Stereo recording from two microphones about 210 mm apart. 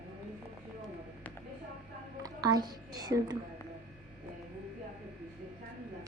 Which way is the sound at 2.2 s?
20° right (ahead or behind).